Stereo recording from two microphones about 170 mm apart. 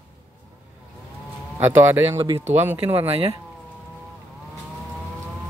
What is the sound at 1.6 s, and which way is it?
Speech, 10° right (ahead or behind).